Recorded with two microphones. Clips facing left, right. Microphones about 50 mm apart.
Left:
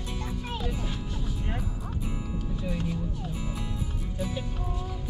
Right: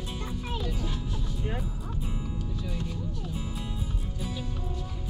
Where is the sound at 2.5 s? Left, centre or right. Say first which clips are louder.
Left 4 dB; centre.